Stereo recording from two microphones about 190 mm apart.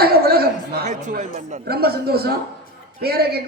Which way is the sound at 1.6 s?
55° right (ahead or behind).